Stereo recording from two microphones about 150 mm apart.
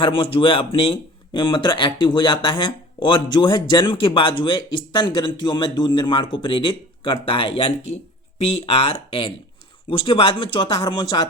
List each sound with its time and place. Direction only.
0.0 s speech: 35° left (ahead or behind)